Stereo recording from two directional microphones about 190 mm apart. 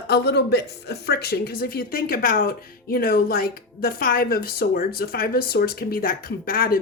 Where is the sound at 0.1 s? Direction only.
60° left (ahead or behind).